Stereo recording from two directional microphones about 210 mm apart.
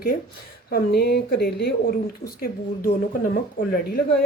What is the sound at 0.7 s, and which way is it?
Speech, 50° left (ahead or behind).